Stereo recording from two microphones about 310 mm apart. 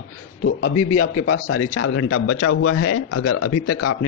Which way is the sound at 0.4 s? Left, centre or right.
Left.